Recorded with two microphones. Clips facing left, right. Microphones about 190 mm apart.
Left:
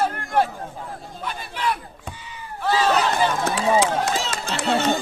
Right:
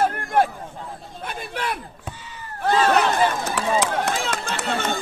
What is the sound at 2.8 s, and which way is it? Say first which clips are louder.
Speech: right 2 dB; 55° right (ahead or behind).